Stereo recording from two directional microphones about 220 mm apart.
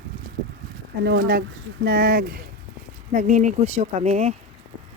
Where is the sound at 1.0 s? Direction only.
50° right (ahead or behind).